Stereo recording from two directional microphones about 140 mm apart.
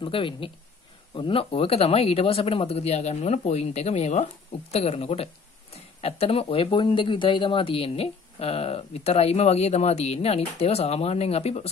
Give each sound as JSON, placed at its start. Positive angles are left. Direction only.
{"t": 0.0, "sound": "speech", "side_deg": 40}